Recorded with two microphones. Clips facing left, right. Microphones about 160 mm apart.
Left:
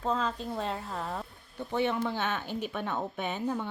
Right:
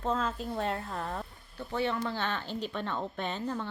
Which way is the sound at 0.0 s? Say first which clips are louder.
Left 1 dB; 5° right (ahead or behind).